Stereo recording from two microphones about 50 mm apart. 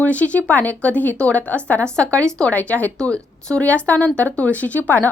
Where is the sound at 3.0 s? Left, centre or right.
Left.